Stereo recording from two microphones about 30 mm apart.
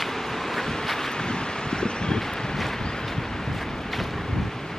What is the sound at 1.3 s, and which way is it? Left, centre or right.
Wind, left.